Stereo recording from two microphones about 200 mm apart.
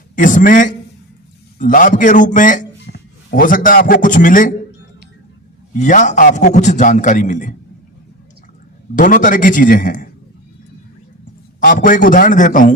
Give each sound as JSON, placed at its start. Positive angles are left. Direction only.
{"t": 0.2, "sound": "a man's voice", "side_deg": 40}
{"t": 2.8, "sound": "a man's voice", "side_deg": 50}
{"t": 5.7, "sound": "a man's voice", "side_deg": 40}
{"t": 9.0, "sound": "a man's voice", "side_deg": 40}
{"t": 11.6, "sound": "a man's voice", "side_deg": 40}